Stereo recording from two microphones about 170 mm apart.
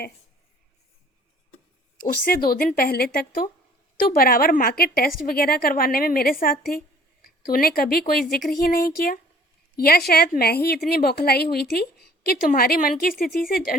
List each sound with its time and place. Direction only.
2.2 s a woman's voice: 60° left (ahead or behind)